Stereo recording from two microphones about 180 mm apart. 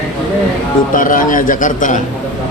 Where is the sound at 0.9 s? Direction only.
50° left (ahead or behind).